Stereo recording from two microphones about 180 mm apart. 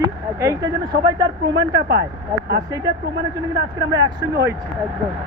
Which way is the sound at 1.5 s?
75° right (ahead or behind).